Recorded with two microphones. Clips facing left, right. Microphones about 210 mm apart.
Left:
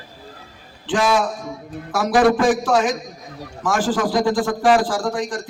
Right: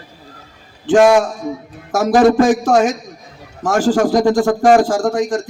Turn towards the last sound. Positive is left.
turn(degrees=-45)  # may be behind; listen again after turning